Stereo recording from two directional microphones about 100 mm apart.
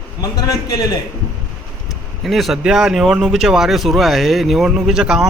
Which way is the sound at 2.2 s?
Centre (ahead or behind).